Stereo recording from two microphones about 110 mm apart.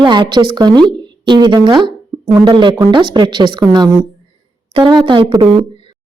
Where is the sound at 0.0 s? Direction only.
45° right (ahead or behind).